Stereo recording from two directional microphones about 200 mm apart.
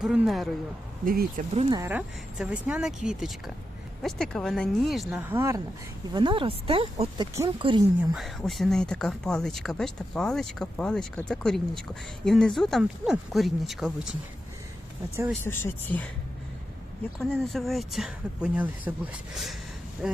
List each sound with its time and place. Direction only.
0.0 s speech: 5° right (ahead or behind)
1.0 s speech: 45° right (ahead or behind)
1.8 s speech: 10° right (ahead or behind)
6.1 s speech: 25° right (ahead or behind)
8.1 s speech: centre (ahead or behind)
15.4 s speech: 10° left (ahead or behind)
17.2 s speech: centre (ahead or behind)